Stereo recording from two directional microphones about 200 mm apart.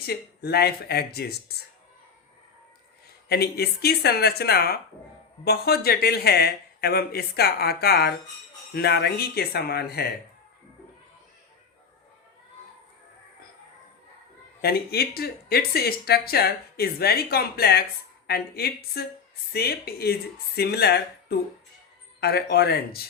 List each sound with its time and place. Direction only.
0.0 s speech: 50° left (ahead or behind)
3.2 s speech: 50° left (ahead or behind)
14.6 s speech: 50° left (ahead or behind)